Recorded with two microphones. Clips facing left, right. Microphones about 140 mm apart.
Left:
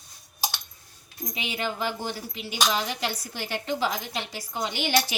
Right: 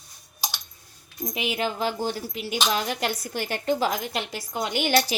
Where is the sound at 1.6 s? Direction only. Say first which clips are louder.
Right 2 dB; 40° right (ahead or behind).